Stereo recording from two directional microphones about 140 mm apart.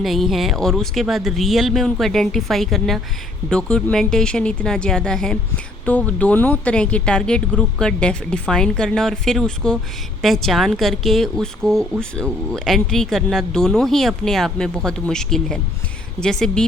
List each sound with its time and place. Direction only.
0.0 s speech: centre (ahead or behind)